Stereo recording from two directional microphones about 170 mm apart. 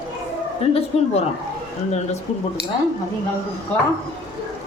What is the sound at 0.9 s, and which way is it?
Speech, 35° left (ahead or behind).